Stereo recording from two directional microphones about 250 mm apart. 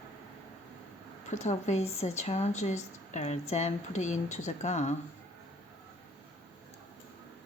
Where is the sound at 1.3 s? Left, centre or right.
Left.